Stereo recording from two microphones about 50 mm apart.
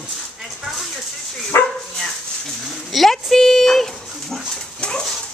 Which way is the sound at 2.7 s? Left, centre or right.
Centre.